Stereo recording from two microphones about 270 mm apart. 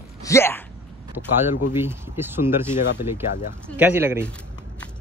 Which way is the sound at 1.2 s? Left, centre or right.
Left.